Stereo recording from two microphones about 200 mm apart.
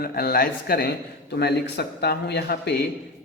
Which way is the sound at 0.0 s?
50° left (ahead or behind).